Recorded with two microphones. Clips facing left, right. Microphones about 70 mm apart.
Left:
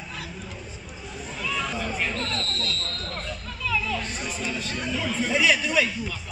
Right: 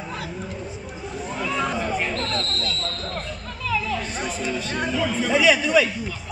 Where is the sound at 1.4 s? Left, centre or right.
Right.